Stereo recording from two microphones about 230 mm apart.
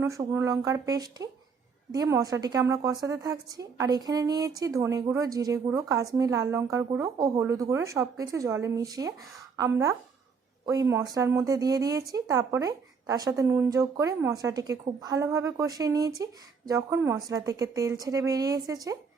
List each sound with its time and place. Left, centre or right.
0.0 s speech: centre